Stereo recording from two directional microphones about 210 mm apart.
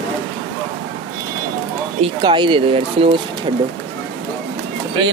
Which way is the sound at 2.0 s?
25° right (ahead or behind).